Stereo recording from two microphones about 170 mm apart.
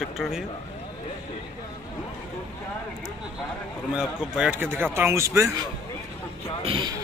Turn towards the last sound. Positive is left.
turn(degrees=-30)  # may be behind; listen again after turning